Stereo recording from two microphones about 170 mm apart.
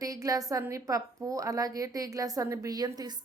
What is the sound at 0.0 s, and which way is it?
A woman's voice, 20° right (ahead or behind).